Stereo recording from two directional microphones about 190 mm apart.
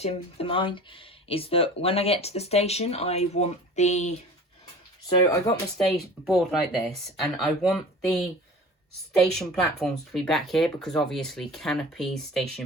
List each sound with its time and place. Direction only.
0.0 s speech: 30° left (ahead or behind)
5.0 s speech: 15° left (ahead or behind)
5.7 s speech: centre (ahead or behind)
9.3 s speech: centre (ahead or behind)